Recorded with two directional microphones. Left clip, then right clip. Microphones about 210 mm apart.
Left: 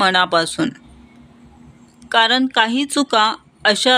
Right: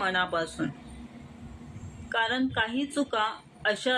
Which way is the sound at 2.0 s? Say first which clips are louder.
Left 13 dB; 55° left (ahead or behind).